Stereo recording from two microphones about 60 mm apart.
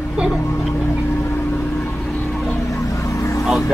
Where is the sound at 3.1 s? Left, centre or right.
Left.